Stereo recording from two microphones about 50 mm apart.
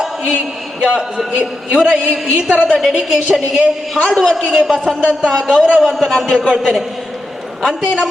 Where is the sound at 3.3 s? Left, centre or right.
Centre.